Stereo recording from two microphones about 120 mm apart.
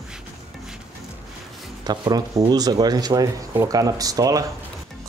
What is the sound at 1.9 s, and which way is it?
Speech, 35° right (ahead or behind).